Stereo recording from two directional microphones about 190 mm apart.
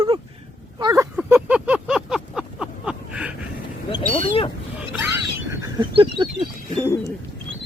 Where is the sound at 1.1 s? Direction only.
5° right (ahead or behind).